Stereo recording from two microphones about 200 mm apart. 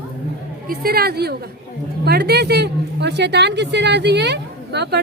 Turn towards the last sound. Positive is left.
turn(degrees=-55)  # may be behind; listen again after turning